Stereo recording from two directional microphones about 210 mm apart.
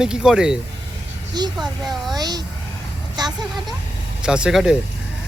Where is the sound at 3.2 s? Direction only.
20° right (ahead or behind).